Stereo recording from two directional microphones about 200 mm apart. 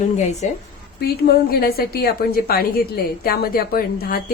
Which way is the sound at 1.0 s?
50° left (ahead or behind).